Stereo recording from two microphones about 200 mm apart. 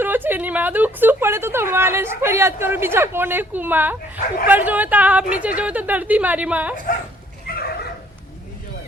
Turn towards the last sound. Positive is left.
turn(degrees=50)  # may be behind; listen again after turning